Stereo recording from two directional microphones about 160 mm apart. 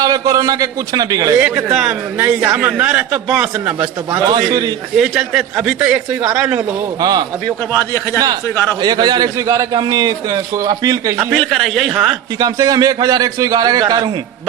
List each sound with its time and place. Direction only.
0.0 s a man's voice: 20° right (ahead or behind)
1.4 s a man's voice: 5° right (ahead or behind)
4.3 s a man's voice: 25° right (ahead or behind)
4.9 s a man's voice: 5° right (ahead or behind); by 7.3 s 25° right (ahead or behind)
7.7 s a man's voice: 15° left (ahead or behind)
8.8 s a man's voice: 25° right (ahead or behind)
11.3 s speech: 5° left (ahead or behind)
12.4 s a man's voice: 25° right (ahead or behind)